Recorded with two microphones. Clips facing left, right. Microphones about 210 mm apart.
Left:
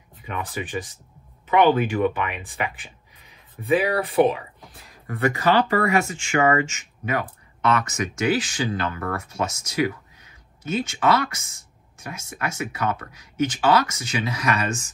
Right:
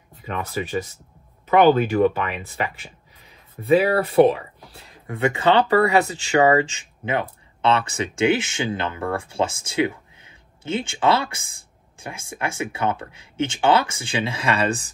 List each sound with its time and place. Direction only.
1.6 s speech: 30° right (ahead or behind)